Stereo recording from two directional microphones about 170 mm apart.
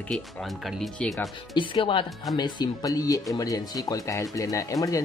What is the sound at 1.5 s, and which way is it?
Speech, 30° left (ahead or behind).